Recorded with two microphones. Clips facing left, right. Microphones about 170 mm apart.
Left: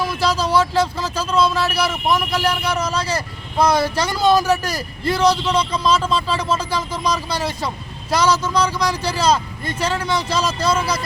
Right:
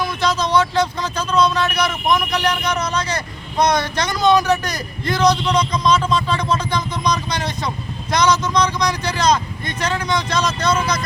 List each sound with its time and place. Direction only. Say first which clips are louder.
0.0 s speech: even; 10° left (ahead or behind)
9.6 s speech: left 1 dB; 30° left (ahead or behind)
10.0 s speech: even; 5° left (ahead or behind)